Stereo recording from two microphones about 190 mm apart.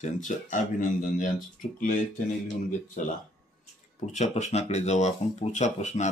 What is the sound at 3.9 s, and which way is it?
Speech, 35° left (ahead or behind).